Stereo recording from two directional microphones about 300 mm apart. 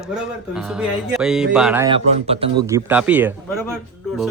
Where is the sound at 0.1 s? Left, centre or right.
Centre.